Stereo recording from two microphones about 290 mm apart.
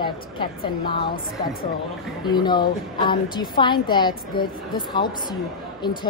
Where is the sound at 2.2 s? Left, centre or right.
Centre.